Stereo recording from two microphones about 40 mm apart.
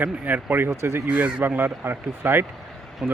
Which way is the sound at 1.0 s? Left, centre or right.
Right.